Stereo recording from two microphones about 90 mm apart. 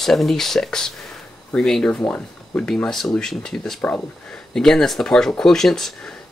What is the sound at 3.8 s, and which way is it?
Speech, 20° left (ahead or behind).